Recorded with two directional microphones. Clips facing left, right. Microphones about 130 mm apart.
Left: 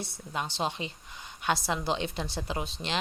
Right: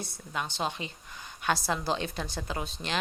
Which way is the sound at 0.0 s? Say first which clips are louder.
Left 1 dB; 30° left (ahead or behind).